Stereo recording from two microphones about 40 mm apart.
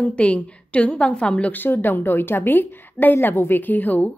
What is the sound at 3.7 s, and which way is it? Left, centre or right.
Speech, left.